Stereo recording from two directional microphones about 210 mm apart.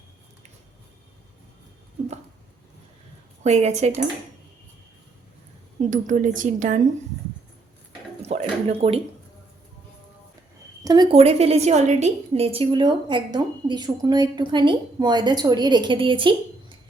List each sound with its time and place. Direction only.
3.4 s speech: 30° right (ahead or behind)
5.8 s speech: 35° right (ahead or behind)
8.2 s a sound: 30° right (ahead or behind)
10.8 s a woman's voice: 20° right (ahead or behind)